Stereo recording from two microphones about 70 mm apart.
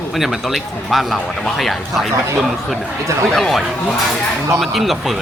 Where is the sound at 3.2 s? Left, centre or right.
Centre.